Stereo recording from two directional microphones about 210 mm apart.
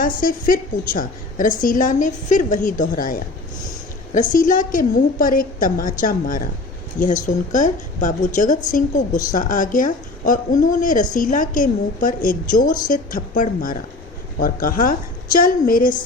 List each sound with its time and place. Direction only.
0.0 s a woman's voice: 40° left (ahead or behind)